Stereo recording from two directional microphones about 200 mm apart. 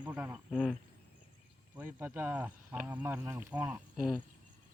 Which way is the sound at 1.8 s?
10° right (ahead or behind).